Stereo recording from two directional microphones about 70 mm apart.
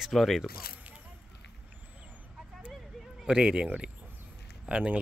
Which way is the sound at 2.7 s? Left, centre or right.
Centre.